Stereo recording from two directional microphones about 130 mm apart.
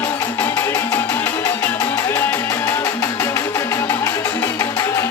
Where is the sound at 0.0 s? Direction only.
15° left (ahead or behind).